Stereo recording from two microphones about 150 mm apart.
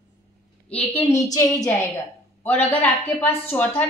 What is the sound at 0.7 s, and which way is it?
A woman's voice, 15° left (ahead or behind).